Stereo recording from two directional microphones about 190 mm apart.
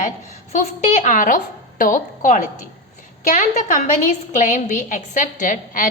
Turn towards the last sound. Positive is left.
turn(degrees=45)  # may be behind; listen again after turning